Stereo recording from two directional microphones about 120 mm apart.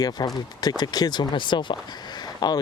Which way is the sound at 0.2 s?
35° left (ahead or behind).